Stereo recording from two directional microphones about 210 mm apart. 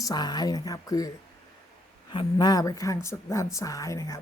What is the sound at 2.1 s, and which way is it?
A woman's voice, 20° left (ahead or behind).